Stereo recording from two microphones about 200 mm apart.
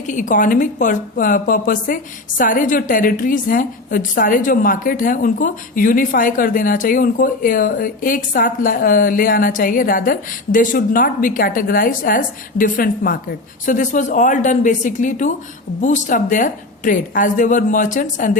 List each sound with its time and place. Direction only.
0.1 s a woman's voice: 40° left (ahead or behind)